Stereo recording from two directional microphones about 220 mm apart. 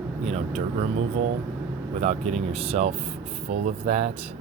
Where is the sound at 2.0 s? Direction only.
30° right (ahead or behind).